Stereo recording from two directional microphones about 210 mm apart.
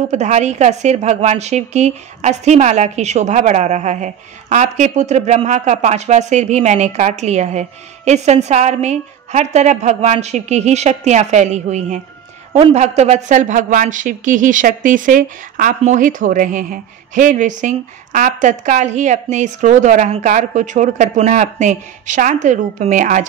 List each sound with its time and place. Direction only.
0.1 s a woman's voice: 35° right (ahead or behind)